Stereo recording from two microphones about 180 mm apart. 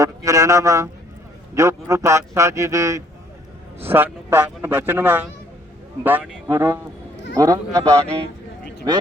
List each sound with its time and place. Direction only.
0.0 s a man's voice: 20° right (ahead or behind)